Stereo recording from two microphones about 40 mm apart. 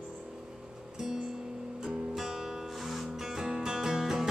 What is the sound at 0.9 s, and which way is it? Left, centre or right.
Music, centre.